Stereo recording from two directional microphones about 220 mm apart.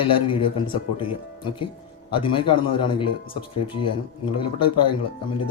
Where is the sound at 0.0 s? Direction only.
25° left (ahead or behind).